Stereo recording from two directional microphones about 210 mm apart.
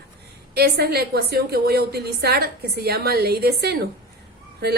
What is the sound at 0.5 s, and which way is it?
A woman's voice, 50° right (ahead or behind).